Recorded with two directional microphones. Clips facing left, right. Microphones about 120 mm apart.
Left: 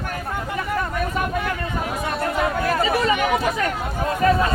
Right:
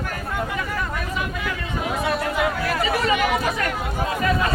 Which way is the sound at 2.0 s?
45° left (ahead or behind).